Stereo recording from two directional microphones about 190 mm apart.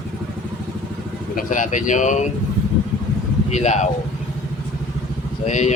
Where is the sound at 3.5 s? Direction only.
35° left (ahead or behind).